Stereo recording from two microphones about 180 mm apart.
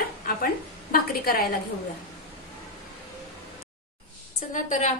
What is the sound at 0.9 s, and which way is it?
Speech, 55° left (ahead or behind).